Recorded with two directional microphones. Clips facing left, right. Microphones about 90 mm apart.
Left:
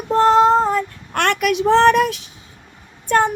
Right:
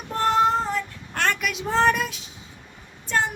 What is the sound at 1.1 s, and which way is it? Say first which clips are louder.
Speech: left 8 dB; 70° left (ahead or behind).